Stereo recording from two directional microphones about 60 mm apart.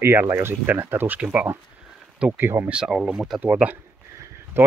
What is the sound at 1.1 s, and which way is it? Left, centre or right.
Speech, centre.